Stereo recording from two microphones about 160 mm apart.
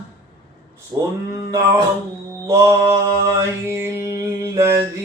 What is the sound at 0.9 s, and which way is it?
Mantra, 20° right (ahead or behind).